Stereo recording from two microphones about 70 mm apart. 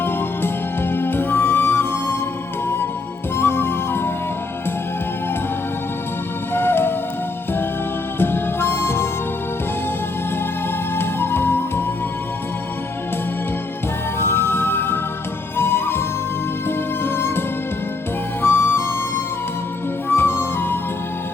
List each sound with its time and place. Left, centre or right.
0.0 s music: left
3.3 s music: left
6.5 s music: left
8.2 s music: left
10.9 s music: left
14.2 s music: left
18.4 s music: left